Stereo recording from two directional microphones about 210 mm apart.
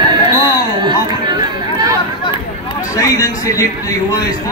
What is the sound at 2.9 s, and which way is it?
A man's voice, 15° left (ahead or behind).